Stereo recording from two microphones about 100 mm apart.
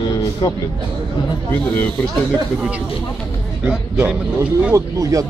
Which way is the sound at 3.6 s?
10° right (ahead or behind).